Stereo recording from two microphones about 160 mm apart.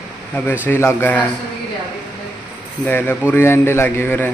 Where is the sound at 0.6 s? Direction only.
15° left (ahead or behind).